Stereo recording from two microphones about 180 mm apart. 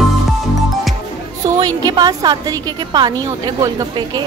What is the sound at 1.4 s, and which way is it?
A woman's voice, 20° right (ahead or behind).